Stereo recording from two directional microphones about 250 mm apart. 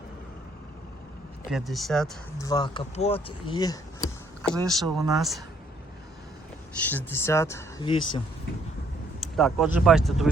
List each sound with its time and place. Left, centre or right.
1.5 s speech: centre
2.4 s speech: centre
4.4 s speech: centre
6.7 s speech: centre
9.2 s speech: centre